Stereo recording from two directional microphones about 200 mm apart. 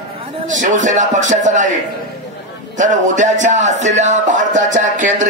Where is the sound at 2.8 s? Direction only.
40° right (ahead or behind).